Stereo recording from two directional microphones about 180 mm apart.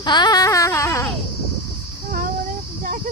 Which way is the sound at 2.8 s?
45° right (ahead or behind).